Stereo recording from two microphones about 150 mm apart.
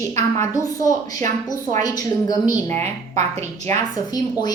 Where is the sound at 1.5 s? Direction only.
25° left (ahead or behind).